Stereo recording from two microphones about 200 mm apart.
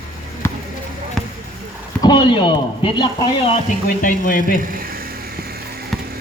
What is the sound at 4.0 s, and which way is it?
Speech, 45° left (ahead or behind).